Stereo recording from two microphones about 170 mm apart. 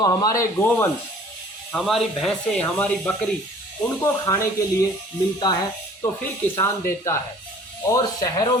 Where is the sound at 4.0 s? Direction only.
20° left (ahead or behind).